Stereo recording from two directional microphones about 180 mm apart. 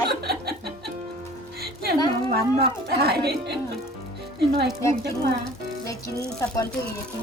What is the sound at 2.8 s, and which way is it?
Speech, 60° right (ahead or behind).